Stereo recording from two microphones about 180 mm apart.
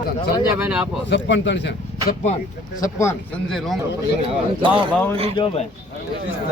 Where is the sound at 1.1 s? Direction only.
75° left (ahead or behind).